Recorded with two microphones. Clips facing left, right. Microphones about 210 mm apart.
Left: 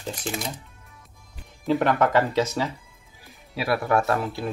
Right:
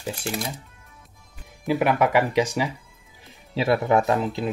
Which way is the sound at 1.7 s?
10° right (ahead or behind).